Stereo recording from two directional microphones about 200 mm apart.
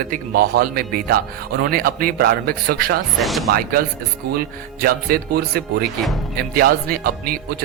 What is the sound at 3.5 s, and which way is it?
Speech, 45° right (ahead or behind).